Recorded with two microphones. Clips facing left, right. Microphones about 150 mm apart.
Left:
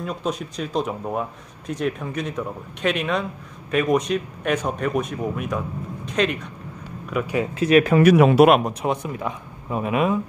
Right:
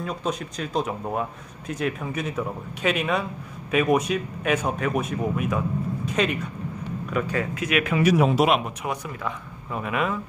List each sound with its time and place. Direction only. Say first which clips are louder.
0.0 s speech: left 2 dB; centre (ahead or behind)
7.5 s speech: left 11 dB; 35° left (ahead or behind)
8.0 s a man's voice: left 4 dB; 65° left (ahead or behind)
8.8 s speech: left 5 dB; 20° left (ahead or behind)